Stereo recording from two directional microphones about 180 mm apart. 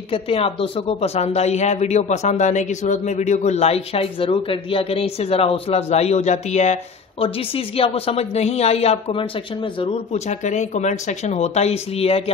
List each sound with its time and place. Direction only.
0.1 s speech: 30° left (ahead or behind)